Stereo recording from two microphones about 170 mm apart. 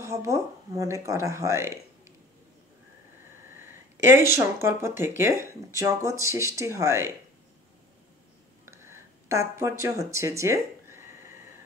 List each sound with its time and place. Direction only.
0.0 s speech: 20° right (ahead or behind)
4.0 s speech: 15° right (ahead or behind)
8.6 s a sound: 15° right (ahead or behind)